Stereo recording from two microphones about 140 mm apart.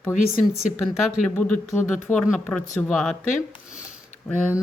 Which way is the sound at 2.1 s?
5° left (ahead or behind).